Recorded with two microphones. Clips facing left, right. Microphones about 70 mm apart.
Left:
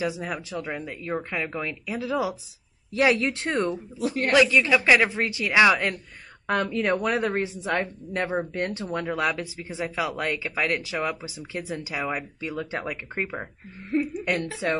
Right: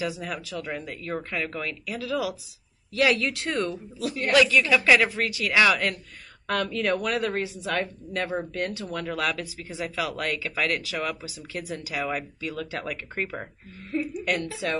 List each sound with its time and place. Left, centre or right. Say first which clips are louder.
0.0 s speech: left 2 dB; left
14.2 s a woman's voice: left 1 dB; left